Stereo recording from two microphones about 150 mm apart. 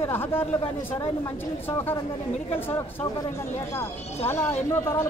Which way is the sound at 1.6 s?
15° left (ahead or behind).